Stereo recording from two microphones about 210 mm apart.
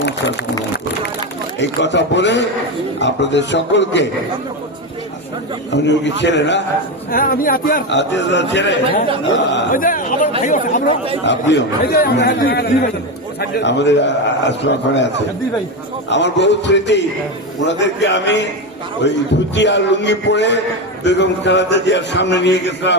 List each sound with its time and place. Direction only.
1.5 s a man's voice: 55° left (ahead or behind)
5.7 s a man's voice: 55° left (ahead or behind)
7.1 s a man's voice: 40° left (ahead or behind)
7.9 s a man's voice: 60° left (ahead or behind)
9.7 s a sound: 40° left (ahead or behind)
10.4 s speech: 40° left (ahead or behind)
11.3 s a man's voice: 60° left (ahead or behind)